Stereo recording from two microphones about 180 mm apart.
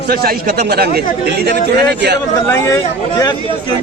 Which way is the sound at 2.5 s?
15° left (ahead or behind).